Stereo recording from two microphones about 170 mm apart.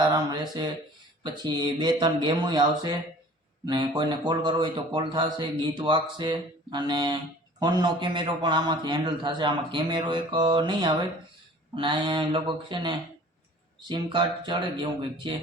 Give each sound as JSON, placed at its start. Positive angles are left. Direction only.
{"t": 0.0, "sound": "speech", "side_deg": -25}